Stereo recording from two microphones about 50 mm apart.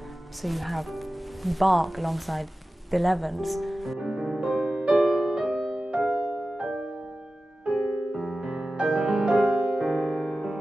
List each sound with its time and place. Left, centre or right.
0.4 s speech: centre
4.0 s music: centre